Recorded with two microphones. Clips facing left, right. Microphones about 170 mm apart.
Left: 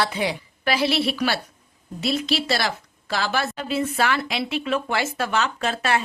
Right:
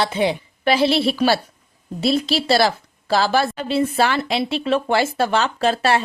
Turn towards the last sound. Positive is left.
turn(degrees=-30)  # may be behind; listen again after turning